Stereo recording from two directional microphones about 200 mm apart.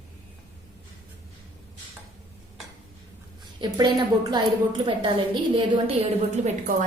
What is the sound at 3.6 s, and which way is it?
A woman's voice, 20° right (ahead or behind).